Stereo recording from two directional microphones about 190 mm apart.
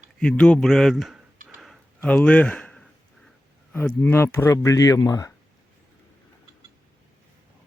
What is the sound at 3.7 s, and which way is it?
Speech, 10° left (ahead or behind).